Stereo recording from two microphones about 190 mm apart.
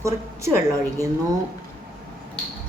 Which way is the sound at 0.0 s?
15° right (ahead or behind).